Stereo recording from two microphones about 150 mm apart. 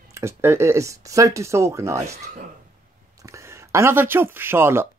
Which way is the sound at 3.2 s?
20° right (ahead or behind).